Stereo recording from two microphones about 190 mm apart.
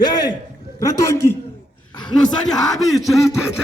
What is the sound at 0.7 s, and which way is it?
Speech, 20° left (ahead or behind).